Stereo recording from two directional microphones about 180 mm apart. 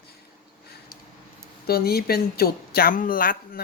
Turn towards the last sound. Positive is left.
turn(degrees=50)  # may be behind; listen again after turning